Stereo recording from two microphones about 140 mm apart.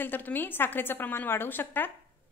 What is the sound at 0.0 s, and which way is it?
A woman's voice, 15° left (ahead or behind).